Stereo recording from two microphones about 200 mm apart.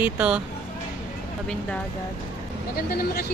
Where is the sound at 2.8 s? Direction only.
50° left (ahead or behind).